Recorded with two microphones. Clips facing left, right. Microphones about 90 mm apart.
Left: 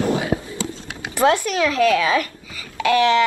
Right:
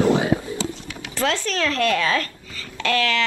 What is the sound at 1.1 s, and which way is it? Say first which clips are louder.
A woman's voice: left 6 dB; 15° left (ahead or behind).